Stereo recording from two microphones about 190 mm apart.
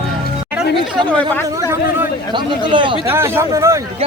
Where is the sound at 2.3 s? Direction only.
25° right (ahead or behind).